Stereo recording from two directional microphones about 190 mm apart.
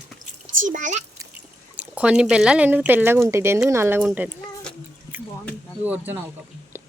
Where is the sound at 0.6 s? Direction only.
40° right (ahead or behind).